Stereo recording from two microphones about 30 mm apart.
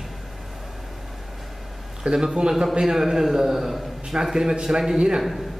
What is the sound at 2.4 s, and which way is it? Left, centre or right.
A man's voice, right.